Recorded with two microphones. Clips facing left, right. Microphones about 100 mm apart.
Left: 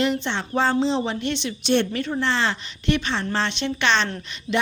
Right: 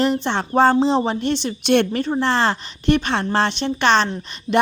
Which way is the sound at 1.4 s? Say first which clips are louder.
Right 3 dB; 55° right (ahead or behind).